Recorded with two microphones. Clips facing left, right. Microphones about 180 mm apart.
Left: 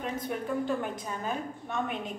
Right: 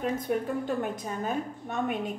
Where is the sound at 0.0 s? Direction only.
45° right (ahead or behind).